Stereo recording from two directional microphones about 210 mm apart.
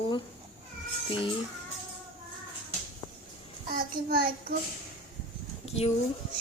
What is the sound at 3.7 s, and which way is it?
Speech, 45° right (ahead or behind).